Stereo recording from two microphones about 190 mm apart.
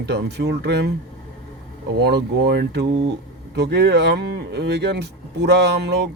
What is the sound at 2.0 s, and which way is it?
Speech, 60° right (ahead or behind).